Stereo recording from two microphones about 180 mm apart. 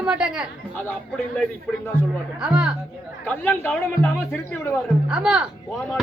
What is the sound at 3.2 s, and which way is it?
Speech, 10° left (ahead or behind).